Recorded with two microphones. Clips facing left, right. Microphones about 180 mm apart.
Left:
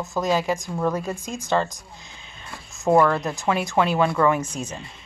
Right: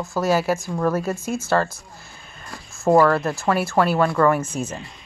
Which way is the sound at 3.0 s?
15° left (ahead or behind).